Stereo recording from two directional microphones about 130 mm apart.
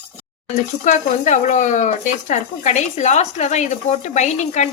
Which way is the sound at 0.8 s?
70° left (ahead or behind).